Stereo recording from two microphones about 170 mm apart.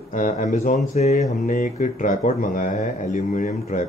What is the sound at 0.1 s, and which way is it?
Speech, 50° left (ahead or behind).